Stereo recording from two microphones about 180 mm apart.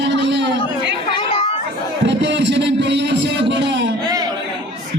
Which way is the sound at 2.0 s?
80° right.